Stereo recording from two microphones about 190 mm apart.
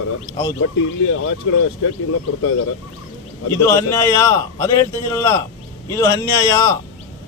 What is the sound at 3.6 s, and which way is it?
A man's voice, 15° left (ahead or behind).